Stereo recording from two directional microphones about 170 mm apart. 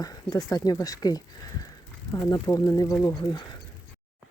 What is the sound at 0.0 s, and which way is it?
Speech, 20° left (ahead or behind).